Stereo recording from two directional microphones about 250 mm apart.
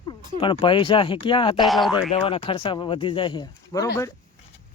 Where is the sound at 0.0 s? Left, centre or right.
Centre.